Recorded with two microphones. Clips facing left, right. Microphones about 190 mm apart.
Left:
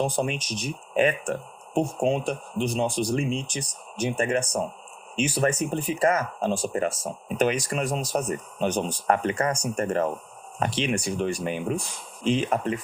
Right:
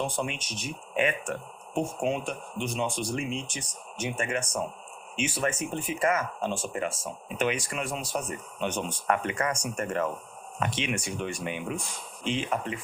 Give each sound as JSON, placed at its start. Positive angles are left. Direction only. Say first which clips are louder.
{"t": 0.0, "sound": "speech", "louder": "left 5 dB", "side_deg": 35}